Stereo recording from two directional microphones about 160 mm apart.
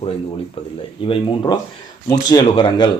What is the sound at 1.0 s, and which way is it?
Speech, 35° left (ahead or behind).